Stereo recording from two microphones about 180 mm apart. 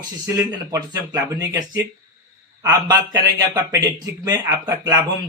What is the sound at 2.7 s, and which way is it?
Speech, 20° right (ahead or behind).